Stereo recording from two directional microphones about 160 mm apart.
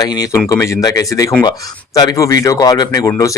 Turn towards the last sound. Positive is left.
turn(degrees=20)  # may be behind; listen again after turning